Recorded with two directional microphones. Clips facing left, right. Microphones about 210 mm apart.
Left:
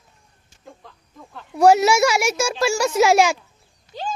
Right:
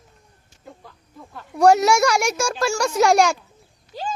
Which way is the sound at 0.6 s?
5° right (ahead or behind).